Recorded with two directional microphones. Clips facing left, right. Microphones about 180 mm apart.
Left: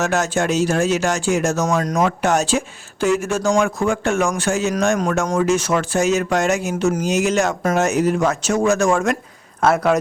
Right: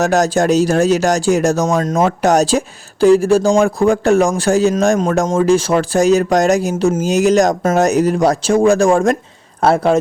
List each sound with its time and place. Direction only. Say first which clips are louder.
0.0 s speech: right 6 dB; 40° right (ahead or behind)